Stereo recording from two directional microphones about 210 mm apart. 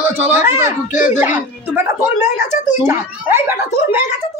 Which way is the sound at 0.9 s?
35° left (ahead or behind).